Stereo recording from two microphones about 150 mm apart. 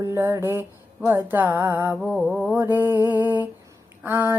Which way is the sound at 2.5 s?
15° right (ahead or behind).